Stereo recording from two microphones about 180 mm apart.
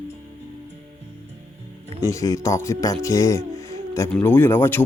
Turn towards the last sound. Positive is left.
turn(degrees=10)  # may be behind; listen again after turning